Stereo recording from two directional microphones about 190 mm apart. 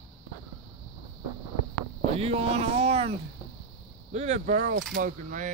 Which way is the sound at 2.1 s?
30° right (ahead or behind).